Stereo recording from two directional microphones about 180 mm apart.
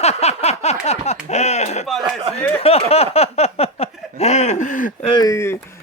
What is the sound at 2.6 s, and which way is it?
Speech, 35° left (ahead or behind).